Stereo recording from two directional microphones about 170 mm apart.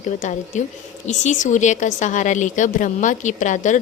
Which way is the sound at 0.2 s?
45° left (ahead or behind).